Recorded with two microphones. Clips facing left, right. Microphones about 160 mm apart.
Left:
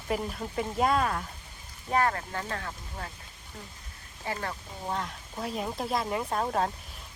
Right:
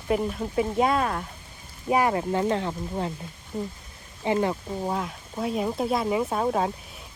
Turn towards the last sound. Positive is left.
turn(degrees=-5)  # may be behind; listen again after turning